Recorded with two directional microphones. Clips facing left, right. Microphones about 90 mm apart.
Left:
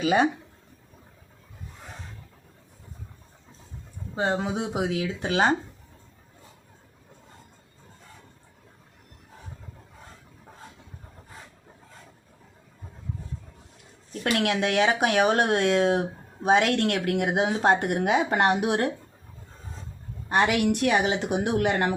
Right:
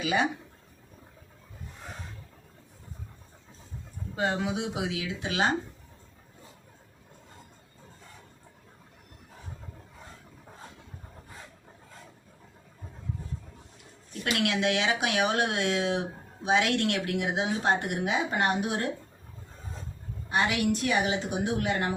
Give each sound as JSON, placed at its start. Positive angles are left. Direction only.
{"t": 0.0, "sound": "speech", "side_deg": 40}
{"t": 4.1, "sound": "speech", "side_deg": 25}
{"t": 14.1, "sound": "speech", "side_deg": 45}
{"t": 20.3, "sound": "a woman's voice", "side_deg": 65}